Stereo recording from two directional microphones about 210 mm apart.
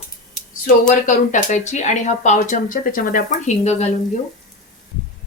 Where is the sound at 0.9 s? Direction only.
35° left (ahead or behind).